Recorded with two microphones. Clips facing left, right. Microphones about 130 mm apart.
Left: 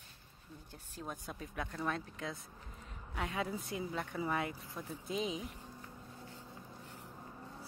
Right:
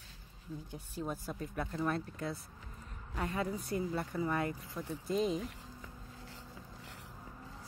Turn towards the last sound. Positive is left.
turn(degrees=-90)